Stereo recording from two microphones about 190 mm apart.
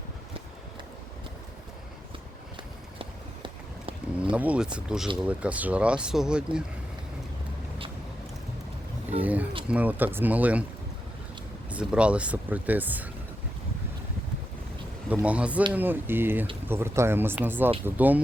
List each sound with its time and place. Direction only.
3.0 s run: 30° right (ahead or behind)
4.2 s speech: 5° right (ahead or behind)
9.0 s roaring cats: 10° right (ahead or behind)
9.6 s speech: 10° right (ahead or behind)
11.7 s speech: 5° right (ahead or behind)
15.1 s speech: 5° right (ahead or behind)